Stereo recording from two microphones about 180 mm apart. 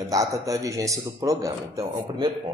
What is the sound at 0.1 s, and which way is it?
A man's voice, 20° right (ahead or behind).